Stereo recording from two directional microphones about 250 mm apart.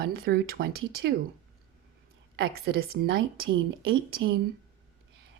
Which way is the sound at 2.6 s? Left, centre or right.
Right.